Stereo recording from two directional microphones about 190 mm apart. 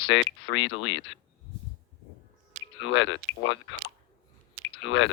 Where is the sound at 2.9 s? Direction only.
75° left (ahead or behind).